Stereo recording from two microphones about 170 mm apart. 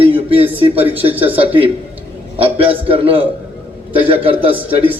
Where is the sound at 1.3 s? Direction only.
35° right (ahead or behind).